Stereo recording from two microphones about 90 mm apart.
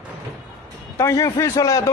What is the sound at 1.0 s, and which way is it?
Speech, 35° left (ahead or behind).